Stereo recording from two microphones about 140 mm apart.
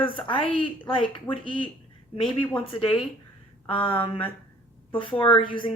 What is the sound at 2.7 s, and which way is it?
Speech, 40° left (ahead or behind).